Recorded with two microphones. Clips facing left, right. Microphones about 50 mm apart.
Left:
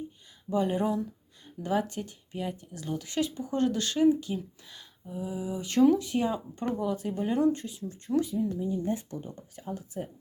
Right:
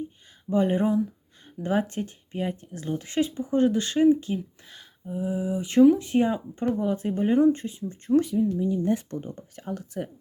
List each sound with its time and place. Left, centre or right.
0.5 s speech: right
8.2 s speech: right
9.0 s speech: right
9.6 s speech: right